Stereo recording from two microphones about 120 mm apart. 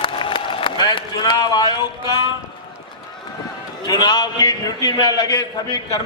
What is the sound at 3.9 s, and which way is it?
A man's voice, 35° left (ahead or behind).